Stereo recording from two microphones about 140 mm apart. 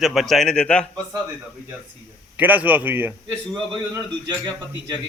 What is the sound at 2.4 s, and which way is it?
Speech, 10° right (ahead or behind).